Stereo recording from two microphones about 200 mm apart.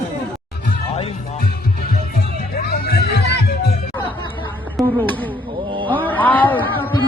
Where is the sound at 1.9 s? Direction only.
50° left (ahead or behind).